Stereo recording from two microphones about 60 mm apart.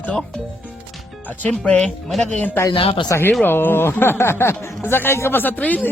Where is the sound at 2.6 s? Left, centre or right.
Left.